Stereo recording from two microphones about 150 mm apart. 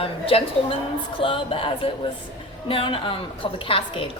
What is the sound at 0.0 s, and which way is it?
A woman's voice, 40° left (ahead or behind).